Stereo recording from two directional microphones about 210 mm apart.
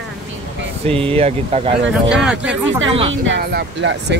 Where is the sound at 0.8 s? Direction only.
25° right (ahead or behind).